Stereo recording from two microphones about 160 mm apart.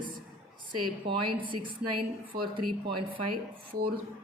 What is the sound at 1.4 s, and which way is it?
Speech, 30° right (ahead or behind).